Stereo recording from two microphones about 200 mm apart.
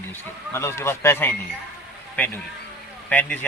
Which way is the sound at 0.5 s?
15° left (ahead or behind).